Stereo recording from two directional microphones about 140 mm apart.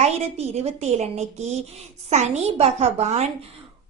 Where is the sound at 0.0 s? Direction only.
50° right (ahead or behind).